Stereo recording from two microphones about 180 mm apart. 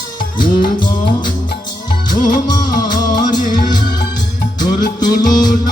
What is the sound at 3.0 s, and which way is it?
Music, 20° left (ahead or behind).